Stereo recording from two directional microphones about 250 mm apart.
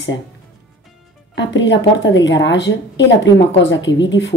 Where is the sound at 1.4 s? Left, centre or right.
Left.